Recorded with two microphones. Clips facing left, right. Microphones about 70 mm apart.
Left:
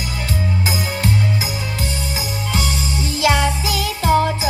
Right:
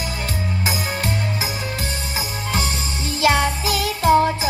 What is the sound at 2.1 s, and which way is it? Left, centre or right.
Music, right.